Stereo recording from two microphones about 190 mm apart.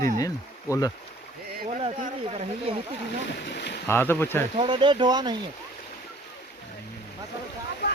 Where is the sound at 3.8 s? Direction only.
10° left (ahead or behind).